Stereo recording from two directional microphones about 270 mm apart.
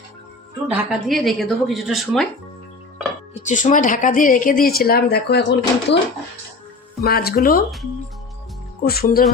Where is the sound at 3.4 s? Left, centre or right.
Left.